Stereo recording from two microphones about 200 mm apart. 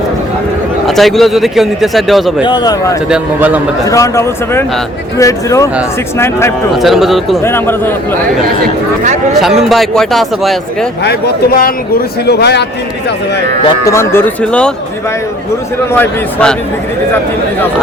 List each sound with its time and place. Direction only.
0.9 s a man's voice: centre (ahead or behind)
2.4 s speech: 20° left (ahead or behind)
3.1 s speech: 10° right (ahead or behind)
3.8 s speech: 15° left (ahead or behind)
6.8 s a man's voice: centre (ahead or behind)
7.4 s speech: 10° left (ahead or behind)
9.4 s a man's voice: centre (ahead or behind)
11.0 s a man's voice: 50° left (ahead or behind)
13.8 s speech: 15° left (ahead or behind)
15.9 s speech: 5° left (ahead or behind)